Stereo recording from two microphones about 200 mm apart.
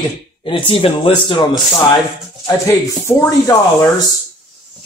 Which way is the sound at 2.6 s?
15° left (ahead or behind).